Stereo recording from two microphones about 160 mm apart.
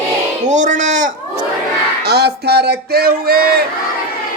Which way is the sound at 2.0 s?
90° right.